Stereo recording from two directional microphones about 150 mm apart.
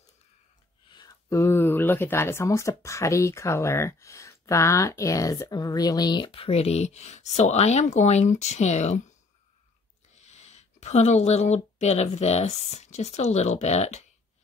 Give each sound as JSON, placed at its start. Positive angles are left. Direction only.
{"t": 0.8, "sound": "a sound", "side_deg": 30}
{"t": 1.3, "sound": "speech", "side_deg": 15}
{"t": 10.1, "sound": "speech", "side_deg": 50}